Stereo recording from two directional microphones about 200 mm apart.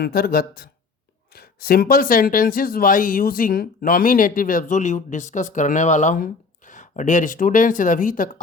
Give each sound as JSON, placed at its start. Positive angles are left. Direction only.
{"t": 0.0, "sound": "speech", "side_deg": 50}